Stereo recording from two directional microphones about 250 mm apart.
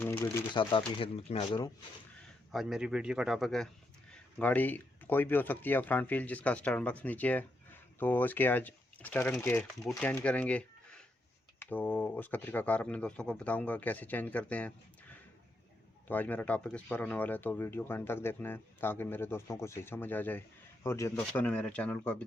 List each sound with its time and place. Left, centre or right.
0.0 s speech: centre
0.5 s speech: centre
2.5 s speech: centre
16.0 s speech: centre